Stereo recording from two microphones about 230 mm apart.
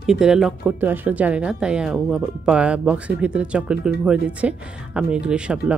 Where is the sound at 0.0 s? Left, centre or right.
Centre.